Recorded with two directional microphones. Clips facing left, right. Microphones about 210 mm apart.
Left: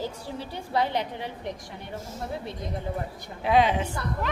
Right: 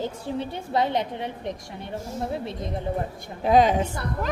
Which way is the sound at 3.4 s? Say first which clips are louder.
Right 3 dB; 40° right (ahead or behind).